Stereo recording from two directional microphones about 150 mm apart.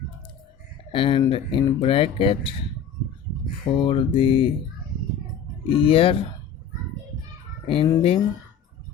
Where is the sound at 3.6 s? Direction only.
35° left (ahead or behind).